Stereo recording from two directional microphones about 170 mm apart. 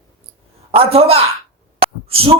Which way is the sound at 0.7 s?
35° right (ahead or behind).